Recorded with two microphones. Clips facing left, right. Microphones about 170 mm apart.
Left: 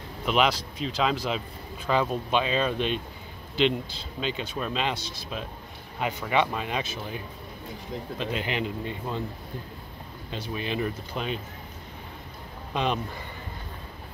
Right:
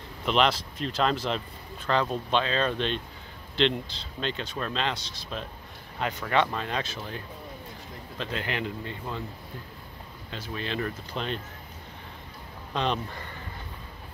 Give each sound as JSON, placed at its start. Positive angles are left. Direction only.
{"t": 0.2, "sound": "speech", "side_deg": 5}
{"t": 10.5, "sound": "speech", "side_deg": 15}
{"t": 12.7, "sound": "speech", "side_deg": 10}